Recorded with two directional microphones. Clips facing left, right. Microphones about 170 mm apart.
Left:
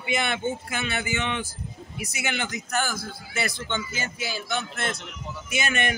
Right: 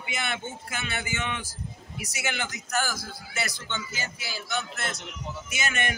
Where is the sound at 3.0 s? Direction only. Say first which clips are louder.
Left 3 dB; 55° left (ahead or behind).